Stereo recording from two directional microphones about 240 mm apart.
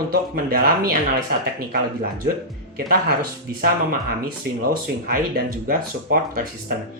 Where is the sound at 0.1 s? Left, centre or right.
Right.